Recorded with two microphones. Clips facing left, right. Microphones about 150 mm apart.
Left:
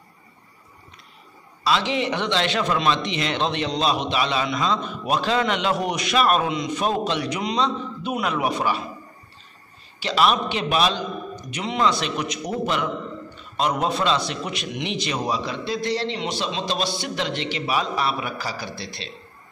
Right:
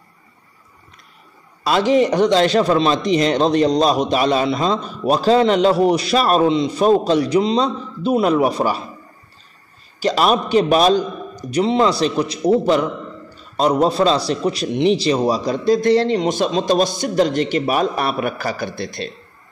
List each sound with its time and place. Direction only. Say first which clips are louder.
1.6 s a man's voice: right 8 dB; 45° right (ahead or behind)
9.9 s a man's voice: right 4 dB; 45° right (ahead or behind)